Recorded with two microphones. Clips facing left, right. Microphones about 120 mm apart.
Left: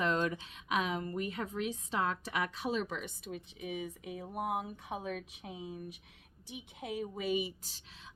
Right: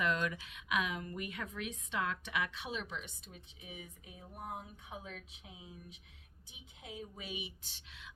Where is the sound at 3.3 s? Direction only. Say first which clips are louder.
Left 13 dB; 70° left (ahead or behind).